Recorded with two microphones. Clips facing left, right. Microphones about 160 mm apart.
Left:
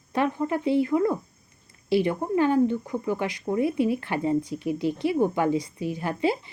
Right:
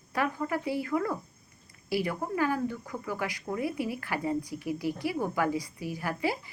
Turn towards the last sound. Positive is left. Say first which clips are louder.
# left 6 dB
turn(degrees=25)  # may be behind; listen again after turning